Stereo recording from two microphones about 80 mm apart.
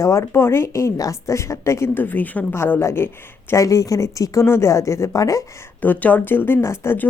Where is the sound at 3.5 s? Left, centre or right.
Left.